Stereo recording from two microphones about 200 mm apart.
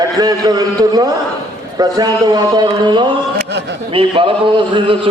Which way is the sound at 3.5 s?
60° right (ahead or behind).